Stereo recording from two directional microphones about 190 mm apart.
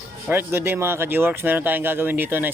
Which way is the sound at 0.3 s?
10° right (ahead or behind).